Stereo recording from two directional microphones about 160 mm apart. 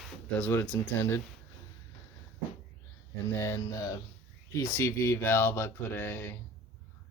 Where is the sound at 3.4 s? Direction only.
20° left (ahead or behind).